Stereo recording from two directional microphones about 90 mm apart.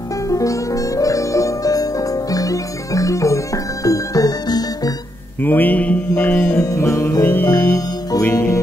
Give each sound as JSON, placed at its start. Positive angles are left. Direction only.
{"t": 0.3, "sound": "music", "side_deg": 40}
{"t": 5.4, "sound": "mantra", "side_deg": 20}
{"t": 6.6, "sound": "music", "side_deg": 35}
{"t": 7.2, "sound": "mantra", "side_deg": 25}